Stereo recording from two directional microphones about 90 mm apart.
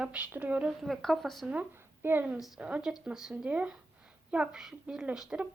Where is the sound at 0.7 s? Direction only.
Centre (ahead or behind).